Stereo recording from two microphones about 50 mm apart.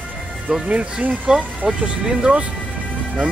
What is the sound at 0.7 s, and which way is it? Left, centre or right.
Speech, right.